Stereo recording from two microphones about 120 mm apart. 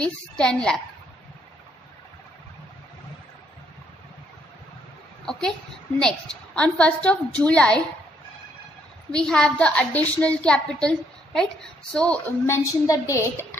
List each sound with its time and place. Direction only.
0.0 s a woman's voice: 5° left (ahead or behind)
5.2 s a sound: 5° left (ahead or behind)
5.9 s a woman's voice: 5° left (ahead or behind)
9.1 s a woman's voice: 5° left (ahead or behind)
12.4 s a woman's voice: 25° left (ahead or behind)